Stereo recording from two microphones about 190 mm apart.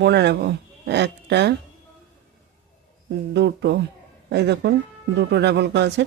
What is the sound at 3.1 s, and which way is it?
Speech, 60° right (ahead or behind).